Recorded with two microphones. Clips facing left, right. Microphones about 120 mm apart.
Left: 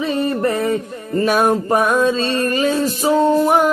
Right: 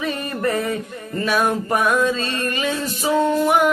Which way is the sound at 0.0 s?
30° left (ahead or behind).